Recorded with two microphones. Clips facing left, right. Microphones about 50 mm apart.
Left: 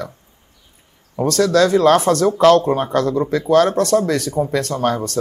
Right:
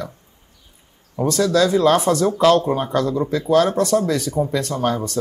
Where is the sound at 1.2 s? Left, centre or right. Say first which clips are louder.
Left 2 dB; left.